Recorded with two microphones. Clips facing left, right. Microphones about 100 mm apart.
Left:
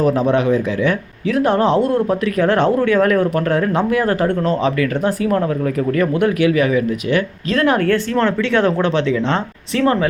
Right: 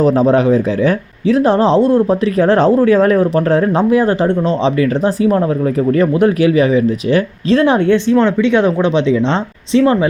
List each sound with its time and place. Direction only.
0.0 s speech: 35° right (ahead or behind)